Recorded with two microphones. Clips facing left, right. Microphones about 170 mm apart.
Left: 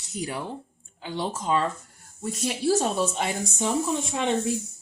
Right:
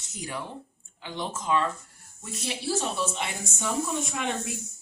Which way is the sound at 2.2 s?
45° left (ahead or behind).